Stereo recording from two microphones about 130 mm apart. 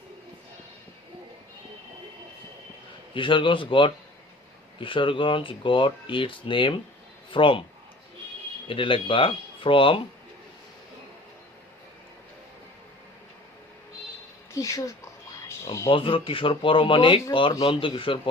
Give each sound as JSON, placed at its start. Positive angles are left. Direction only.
{"t": 3.2, "sound": "speech", "side_deg": 40}
{"t": 8.6, "sound": "speech", "side_deg": 40}
{"t": 14.5, "sound": "speech", "side_deg": 25}
{"t": 15.9, "sound": "speech", "side_deg": 40}